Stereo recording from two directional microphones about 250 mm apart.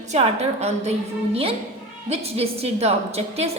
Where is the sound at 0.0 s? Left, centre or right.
Right.